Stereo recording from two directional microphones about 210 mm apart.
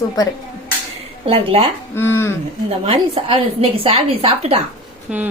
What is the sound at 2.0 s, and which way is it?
Speech, 10° left (ahead or behind).